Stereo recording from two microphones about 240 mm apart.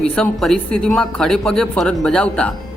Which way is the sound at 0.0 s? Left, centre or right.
Centre.